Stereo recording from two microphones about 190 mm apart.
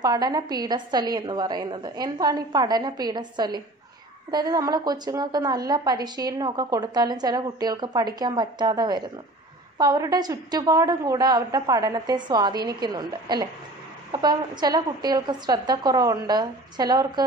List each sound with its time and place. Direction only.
0.0 s a woman's voice: 20° right (ahead or behind)